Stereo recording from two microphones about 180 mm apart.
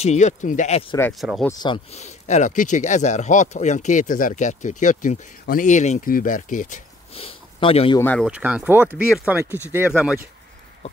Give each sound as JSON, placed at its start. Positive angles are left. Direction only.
{"t": 0.0, "sound": "speech", "side_deg": 40}
{"t": 1.1, "sound": "speech", "side_deg": -5}
{"t": 1.6, "sound": "speech", "side_deg": 25}
{"t": 2.0, "sound": "speech", "side_deg": 40}
{"t": 7.2, "sound": "speech", "side_deg": 30}
{"t": 8.0, "sound": "speech", "side_deg": 10}
{"t": 8.3, "sound": "speech", "side_deg": -5}